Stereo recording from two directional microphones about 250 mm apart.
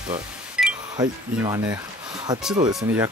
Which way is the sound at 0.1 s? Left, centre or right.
Centre.